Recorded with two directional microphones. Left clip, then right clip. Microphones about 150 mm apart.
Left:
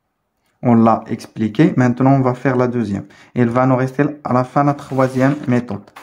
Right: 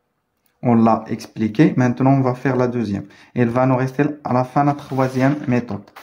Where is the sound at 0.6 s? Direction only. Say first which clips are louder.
Left 2 dB; 30° left (ahead or behind).